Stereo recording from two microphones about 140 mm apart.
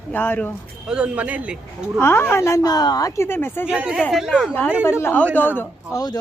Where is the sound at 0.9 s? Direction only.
10° right (ahead or behind).